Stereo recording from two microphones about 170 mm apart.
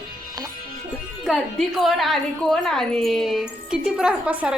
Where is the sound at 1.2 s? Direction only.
Centre (ahead or behind).